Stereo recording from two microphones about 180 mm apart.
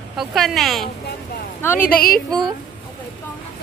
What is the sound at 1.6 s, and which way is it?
Speech, 10° left (ahead or behind).